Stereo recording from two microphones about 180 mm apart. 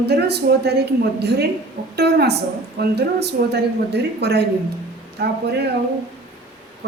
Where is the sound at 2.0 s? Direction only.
65° right (ahead or behind).